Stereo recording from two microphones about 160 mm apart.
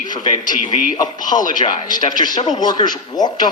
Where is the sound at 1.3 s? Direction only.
30° left (ahead or behind).